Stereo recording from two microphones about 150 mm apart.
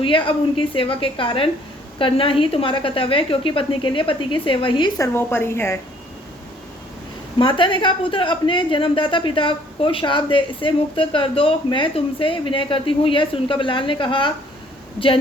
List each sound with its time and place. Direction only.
0.0 s a woman's voice: 35° left (ahead or behind)
4.9 s a woman's voice: 15° left (ahead or behind)
7.3 s a woman's voice: 35° left (ahead or behind)